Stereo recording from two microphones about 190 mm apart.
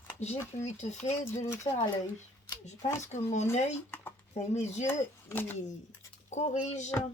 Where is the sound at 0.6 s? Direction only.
35° left (ahead or behind).